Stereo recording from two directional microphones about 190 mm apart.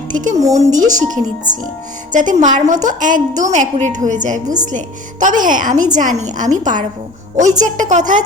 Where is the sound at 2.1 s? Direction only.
40° right (ahead or behind).